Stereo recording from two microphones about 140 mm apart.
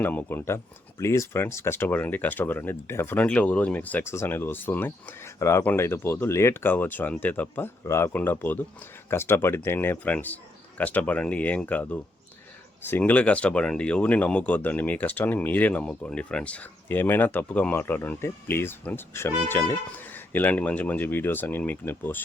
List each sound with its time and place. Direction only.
0.0 s speech: 15° left (ahead or behind)